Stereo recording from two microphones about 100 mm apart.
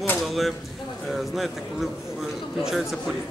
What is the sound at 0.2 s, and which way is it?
Speech, centre (ahead or behind).